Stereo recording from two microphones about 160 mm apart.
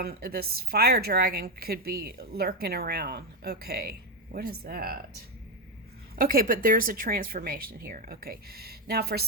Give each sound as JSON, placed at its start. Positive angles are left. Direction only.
{"t": 0.0, "sound": "a woman's voice", "side_deg": -70}
{"t": 6.1, "sound": "speech", "side_deg": -60}